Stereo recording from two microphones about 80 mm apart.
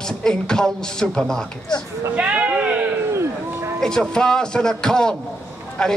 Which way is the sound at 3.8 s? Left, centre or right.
Centre.